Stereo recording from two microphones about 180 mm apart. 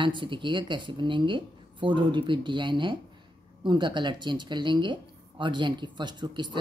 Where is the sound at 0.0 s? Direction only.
25° right (ahead or behind).